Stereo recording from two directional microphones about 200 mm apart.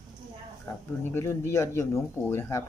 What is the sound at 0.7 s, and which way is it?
Speech, 20° left (ahead or behind).